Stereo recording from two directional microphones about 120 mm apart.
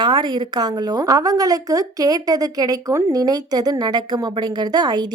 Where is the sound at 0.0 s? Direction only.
40° right (ahead or behind).